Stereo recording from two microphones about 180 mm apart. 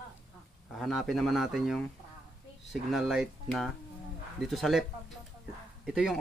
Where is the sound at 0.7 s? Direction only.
Centre (ahead or behind).